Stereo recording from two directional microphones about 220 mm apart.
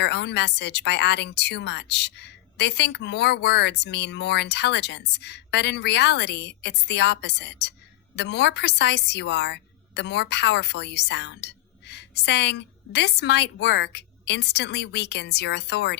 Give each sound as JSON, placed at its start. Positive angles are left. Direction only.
{"t": 0.0, "sound": "a woman's voice", "side_deg": 50}